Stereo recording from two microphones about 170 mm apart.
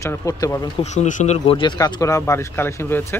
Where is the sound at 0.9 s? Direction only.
45° left (ahead or behind).